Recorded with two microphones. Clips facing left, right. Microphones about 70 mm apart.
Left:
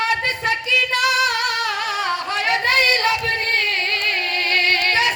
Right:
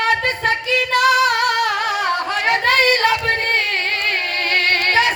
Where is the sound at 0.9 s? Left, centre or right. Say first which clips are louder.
Right 7 dB; right.